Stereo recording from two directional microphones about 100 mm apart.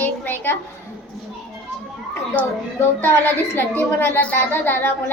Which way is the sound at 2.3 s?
20° left (ahead or behind).